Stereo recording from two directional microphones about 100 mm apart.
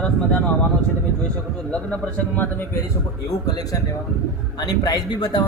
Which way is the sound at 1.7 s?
15° left (ahead or behind).